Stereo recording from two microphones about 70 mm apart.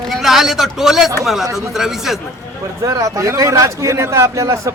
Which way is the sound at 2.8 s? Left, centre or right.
Right.